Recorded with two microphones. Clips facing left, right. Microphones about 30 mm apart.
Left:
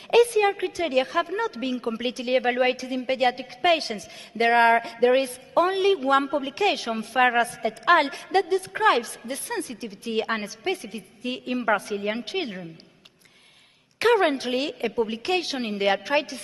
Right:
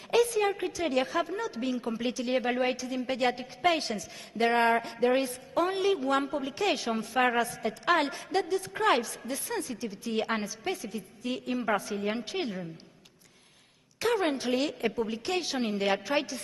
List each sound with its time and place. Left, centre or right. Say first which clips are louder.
0.1 s a woman's voice: left 6 dB; left
13.9 s a woman's voice: left 7 dB; left
14.8 s a woman's voice: left 5 dB; centre
15.0 s a woman's voice: left 5 dB; left